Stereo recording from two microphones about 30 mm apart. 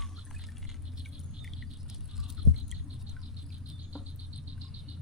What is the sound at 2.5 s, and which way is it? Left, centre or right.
Toothbrush, centre.